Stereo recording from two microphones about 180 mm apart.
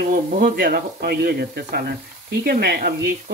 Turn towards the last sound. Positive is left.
turn(degrees=-60)  # may be behind; listen again after turning